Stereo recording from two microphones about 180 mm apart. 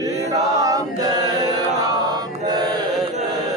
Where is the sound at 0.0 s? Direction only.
20° right (ahead or behind).